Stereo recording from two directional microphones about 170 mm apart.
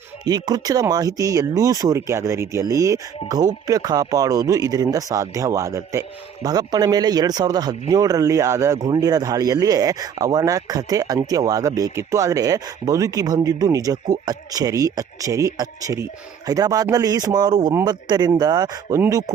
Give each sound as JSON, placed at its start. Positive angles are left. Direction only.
{"t": 0.3, "sound": "speech", "side_deg": -25}